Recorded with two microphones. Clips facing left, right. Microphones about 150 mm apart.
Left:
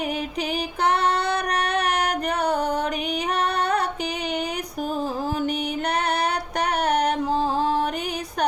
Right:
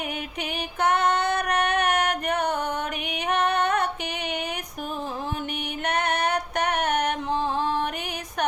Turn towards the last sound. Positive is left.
turn(degrees=35)  # may be behind; listen again after turning